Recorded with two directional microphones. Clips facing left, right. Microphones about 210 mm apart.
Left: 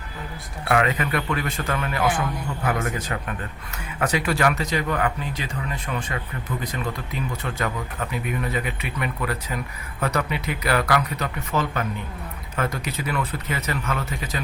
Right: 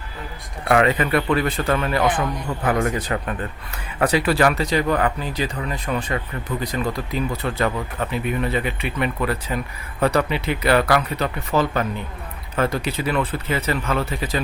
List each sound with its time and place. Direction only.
0.7 s speech: 35° right (ahead or behind)